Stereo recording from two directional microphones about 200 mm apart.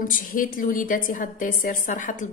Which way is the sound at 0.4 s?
45° left (ahead or behind).